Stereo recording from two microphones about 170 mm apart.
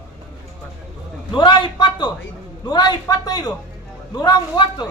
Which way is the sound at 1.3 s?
25° left (ahead or behind).